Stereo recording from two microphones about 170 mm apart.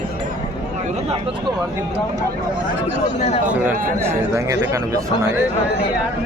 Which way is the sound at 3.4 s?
10° right (ahead or behind).